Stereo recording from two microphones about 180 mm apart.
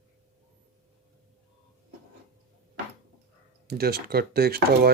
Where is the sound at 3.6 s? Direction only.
60° right (ahead or behind).